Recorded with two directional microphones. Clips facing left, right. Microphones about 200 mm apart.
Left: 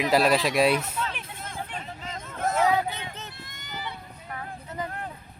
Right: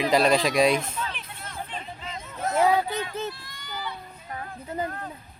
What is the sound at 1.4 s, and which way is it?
Hubbub, 50° left (ahead or behind).